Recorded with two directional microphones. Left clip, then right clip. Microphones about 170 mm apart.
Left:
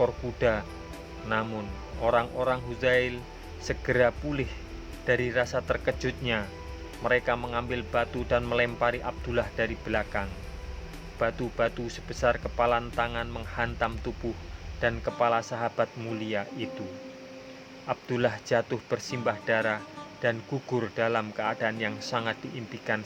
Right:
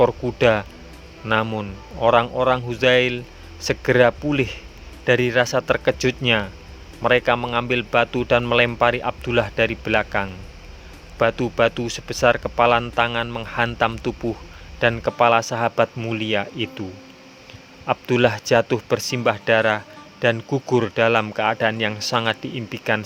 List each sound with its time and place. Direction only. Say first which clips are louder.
0.0 s speech: right 9 dB; 50° right (ahead or behind)
17.8 s speech: right 10 dB; 50° right (ahead or behind)